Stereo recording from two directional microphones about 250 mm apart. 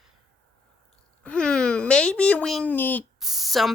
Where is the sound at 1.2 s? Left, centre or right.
Centre.